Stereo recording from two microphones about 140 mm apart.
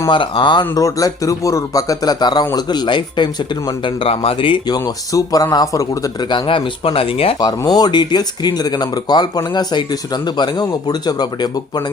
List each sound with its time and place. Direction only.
0.1 s speech: 35° left (ahead or behind)
6.3 s speech: 40° left (ahead or behind)
7.3 s speech: 30° left (ahead or behind)